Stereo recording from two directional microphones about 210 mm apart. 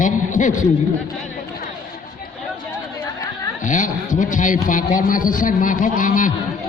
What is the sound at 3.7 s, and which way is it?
A man's voice, 35° left (ahead or behind).